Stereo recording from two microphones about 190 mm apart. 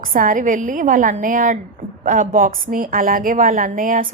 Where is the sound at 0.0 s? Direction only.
45° right (ahead or behind).